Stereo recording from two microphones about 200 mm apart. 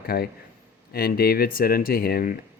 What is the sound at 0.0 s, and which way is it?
A man's voice, 50° left (ahead or behind).